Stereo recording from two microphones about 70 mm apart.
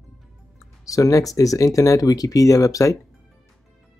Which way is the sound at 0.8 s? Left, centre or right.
Left.